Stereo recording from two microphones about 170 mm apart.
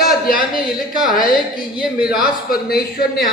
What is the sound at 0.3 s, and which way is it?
Speech, 60° left (ahead or behind).